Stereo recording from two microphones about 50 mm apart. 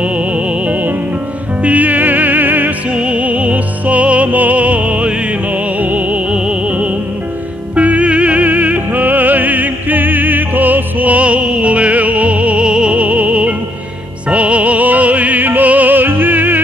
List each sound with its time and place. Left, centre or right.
1.6 s music: right
2.9 s music: right